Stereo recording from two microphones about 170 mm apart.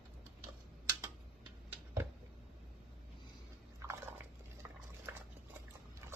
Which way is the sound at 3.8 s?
15° right (ahead or behind).